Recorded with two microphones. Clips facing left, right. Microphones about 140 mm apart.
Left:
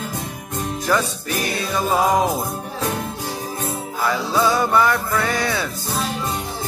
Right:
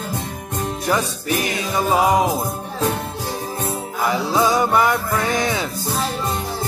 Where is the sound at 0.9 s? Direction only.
15° right (ahead or behind).